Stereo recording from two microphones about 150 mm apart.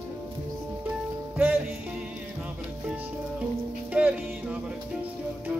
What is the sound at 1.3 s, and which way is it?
Music, 15° right (ahead or behind).